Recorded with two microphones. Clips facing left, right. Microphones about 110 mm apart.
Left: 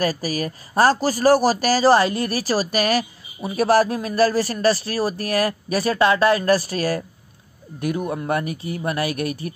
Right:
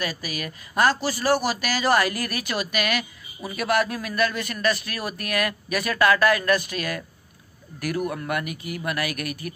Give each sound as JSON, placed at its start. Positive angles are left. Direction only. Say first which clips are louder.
{"t": 0.0, "sound": "a man's voice", "louder": "left 8 dB", "side_deg": 35}
{"t": 7.8, "sound": "speech", "louder": "left 3 dB", "side_deg": 25}